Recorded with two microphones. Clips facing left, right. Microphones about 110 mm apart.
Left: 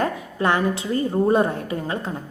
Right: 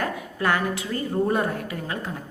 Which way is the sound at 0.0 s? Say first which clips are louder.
Left 4 dB; 25° left (ahead or behind).